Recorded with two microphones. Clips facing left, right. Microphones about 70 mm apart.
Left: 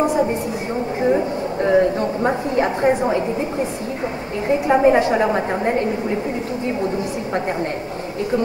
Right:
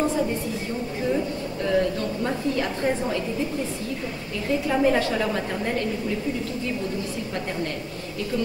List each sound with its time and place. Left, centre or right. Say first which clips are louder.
1.0 s a woman's voice: left 7 dB; left